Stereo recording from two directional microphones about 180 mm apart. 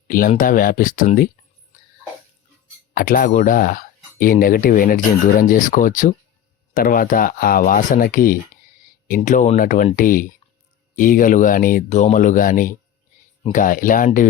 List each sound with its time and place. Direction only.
0.1 s speech: 50° left (ahead or behind)
2.9 s speech: 50° left (ahead or behind)